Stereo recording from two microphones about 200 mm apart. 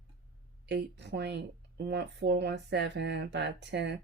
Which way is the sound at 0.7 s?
60° right (ahead or behind).